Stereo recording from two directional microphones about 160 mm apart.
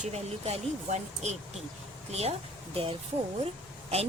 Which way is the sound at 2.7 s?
35° right (ahead or behind).